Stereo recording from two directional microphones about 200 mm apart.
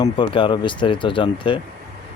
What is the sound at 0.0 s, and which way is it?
Speech, 25° left (ahead or behind).